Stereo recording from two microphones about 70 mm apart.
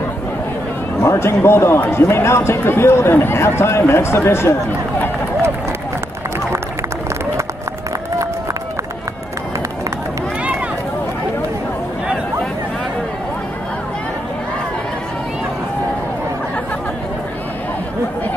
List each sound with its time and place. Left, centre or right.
1.0 s speech: left